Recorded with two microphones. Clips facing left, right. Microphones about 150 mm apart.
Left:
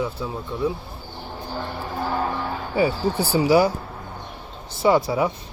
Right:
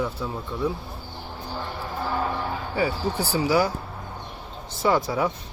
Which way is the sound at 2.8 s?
25° left (ahead or behind).